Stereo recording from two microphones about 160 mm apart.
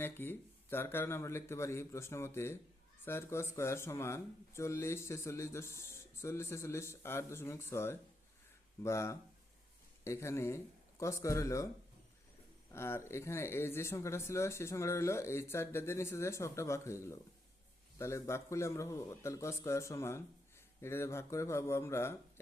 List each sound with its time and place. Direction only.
0.0 s speech: 15° left (ahead or behind)
12.7 s speech: 15° left (ahead or behind)